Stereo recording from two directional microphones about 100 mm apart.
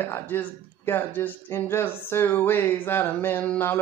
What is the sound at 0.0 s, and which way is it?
Speech, 20° left (ahead or behind).